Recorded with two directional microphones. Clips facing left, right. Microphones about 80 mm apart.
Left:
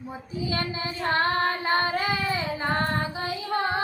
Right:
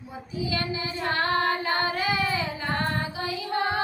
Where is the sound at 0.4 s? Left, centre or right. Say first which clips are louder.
Even; left.